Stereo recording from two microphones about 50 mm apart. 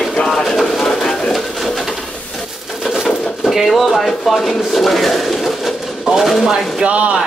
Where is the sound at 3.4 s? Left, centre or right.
Centre.